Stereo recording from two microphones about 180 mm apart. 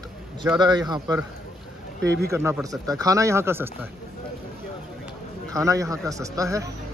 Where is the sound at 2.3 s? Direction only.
15° right (ahead or behind).